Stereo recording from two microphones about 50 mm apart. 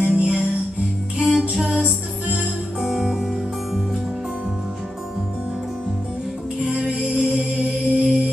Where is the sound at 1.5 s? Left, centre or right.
Centre.